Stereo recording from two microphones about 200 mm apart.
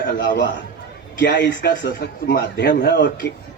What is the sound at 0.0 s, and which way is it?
A man's voice, 60° left (ahead or behind).